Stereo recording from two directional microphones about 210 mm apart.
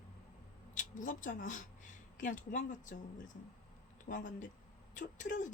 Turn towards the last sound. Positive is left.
turn(degrees=35)  # may be behind; listen again after turning